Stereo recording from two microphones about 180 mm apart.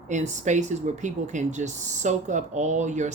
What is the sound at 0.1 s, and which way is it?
Speech, 40° right (ahead or behind).